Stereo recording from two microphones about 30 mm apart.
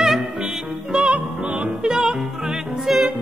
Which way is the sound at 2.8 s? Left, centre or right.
Centre.